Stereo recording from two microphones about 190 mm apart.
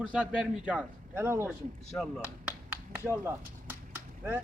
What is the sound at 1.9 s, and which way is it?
Speech, centre (ahead or behind).